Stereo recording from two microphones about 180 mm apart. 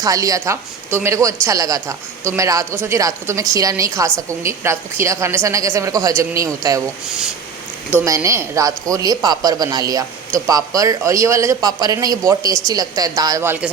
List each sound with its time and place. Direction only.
0.0 s a man's voice: 20° right (ahead or behind)
7.9 s a man's voice: 15° right (ahead or behind)